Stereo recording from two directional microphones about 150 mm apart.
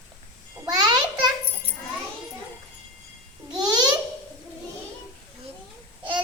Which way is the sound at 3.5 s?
30° right (ahead or behind).